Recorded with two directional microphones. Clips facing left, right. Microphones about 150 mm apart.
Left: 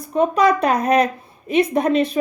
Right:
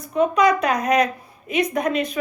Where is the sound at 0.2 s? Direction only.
35° left (ahead or behind).